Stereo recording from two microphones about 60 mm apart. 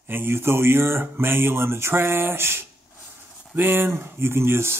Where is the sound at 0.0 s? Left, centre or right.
Right.